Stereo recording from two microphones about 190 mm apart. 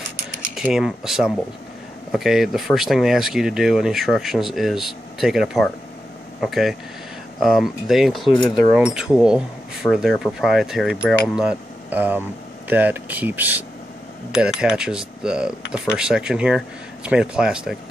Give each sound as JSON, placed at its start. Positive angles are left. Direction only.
{"t": 0.6, "sound": "speech", "side_deg": 0}
{"t": 8.3, "sound": "a sound", "side_deg": 25}
{"t": 8.5, "sound": "speech", "side_deg": -5}